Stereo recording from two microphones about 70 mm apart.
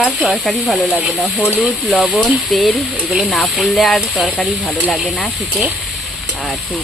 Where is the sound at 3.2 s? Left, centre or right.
Centre.